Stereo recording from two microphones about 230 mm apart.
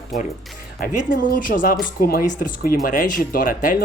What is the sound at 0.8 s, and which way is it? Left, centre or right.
Speech, left.